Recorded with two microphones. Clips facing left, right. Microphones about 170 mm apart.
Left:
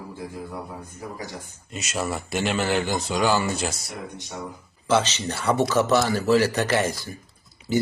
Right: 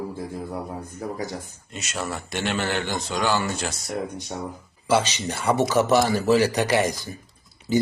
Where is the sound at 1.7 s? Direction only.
5° left (ahead or behind).